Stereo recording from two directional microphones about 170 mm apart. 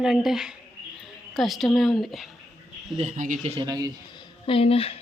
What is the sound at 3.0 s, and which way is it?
Speech, 45° right (ahead or behind).